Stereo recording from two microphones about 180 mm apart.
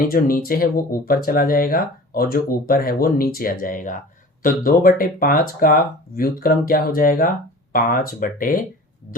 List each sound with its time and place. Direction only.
0.0 s speech: 50° left (ahead or behind)